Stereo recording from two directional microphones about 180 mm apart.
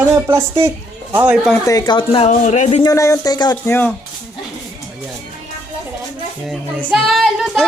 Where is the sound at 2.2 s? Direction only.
40° left (ahead or behind).